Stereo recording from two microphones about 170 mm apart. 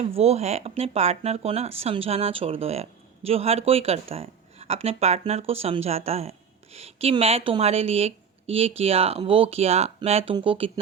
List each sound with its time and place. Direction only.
0.0 s a woman's voice: 40° right (ahead or behind)